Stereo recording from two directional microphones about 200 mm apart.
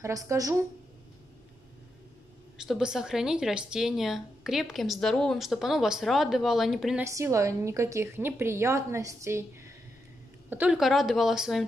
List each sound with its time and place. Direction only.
0.0 s a woman's voice: 15° right (ahead or behind)
2.5 s a woman's voice: 5° right (ahead or behind)
7.1 s a woman's voice: 15° right (ahead or behind)
10.5 s a woman's voice: 5° right (ahead or behind)